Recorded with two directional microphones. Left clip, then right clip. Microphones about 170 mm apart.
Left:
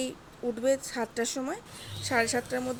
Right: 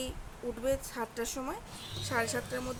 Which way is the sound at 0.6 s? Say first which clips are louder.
Left 5 dB; 25° left (ahead or behind).